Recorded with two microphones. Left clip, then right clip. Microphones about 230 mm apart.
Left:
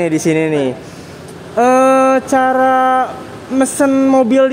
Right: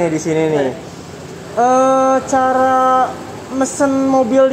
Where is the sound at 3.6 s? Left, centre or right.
Left.